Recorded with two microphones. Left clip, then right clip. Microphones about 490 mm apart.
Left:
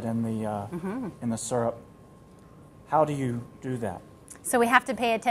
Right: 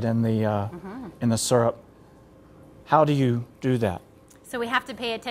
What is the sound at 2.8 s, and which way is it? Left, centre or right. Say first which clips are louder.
Speech: right 5 dB; right.